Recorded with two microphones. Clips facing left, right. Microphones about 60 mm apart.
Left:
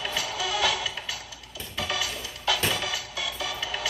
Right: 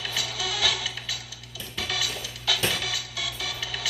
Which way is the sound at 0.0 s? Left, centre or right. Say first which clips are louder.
Left 2 dB; left.